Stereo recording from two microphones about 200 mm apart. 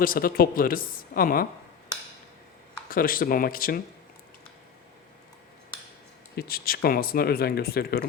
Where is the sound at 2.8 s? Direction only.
45° left (ahead or behind).